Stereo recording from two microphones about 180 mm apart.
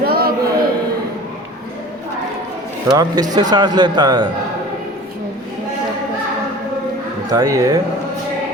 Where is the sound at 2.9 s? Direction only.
20° right (ahead or behind).